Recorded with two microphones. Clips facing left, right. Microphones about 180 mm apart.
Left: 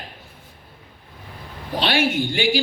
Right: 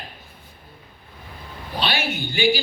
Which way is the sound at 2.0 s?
90° left.